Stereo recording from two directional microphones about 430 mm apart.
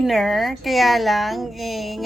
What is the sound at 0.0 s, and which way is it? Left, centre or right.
A woman's voice, centre.